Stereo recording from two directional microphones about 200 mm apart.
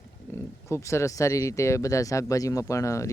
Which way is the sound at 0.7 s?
15° left (ahead or behind).